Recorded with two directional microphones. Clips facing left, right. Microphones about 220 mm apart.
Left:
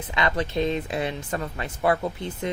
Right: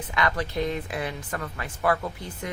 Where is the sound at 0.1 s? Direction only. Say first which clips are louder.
Left 2 dB; 25° left (ahead or behind).